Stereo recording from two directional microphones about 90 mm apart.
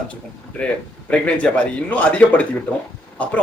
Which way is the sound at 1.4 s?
15° left (ahead or behind).